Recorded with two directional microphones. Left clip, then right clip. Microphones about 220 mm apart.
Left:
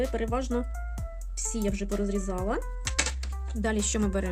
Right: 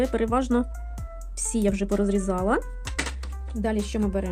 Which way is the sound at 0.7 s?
Centre (ahead or behind).